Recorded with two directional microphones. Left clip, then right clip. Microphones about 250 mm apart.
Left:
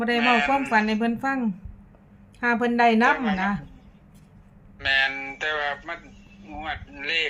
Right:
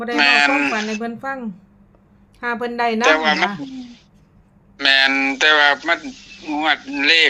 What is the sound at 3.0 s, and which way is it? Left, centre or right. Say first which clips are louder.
Speech: right 7 dB; right.